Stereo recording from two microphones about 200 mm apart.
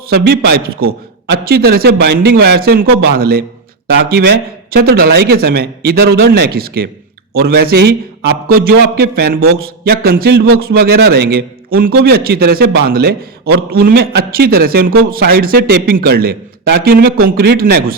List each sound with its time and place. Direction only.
0.1 s a man's voice: 50° right (ahead or behind)